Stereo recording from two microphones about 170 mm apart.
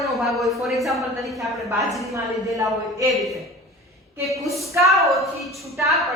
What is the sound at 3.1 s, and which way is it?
Speech, centre (ahead or behind).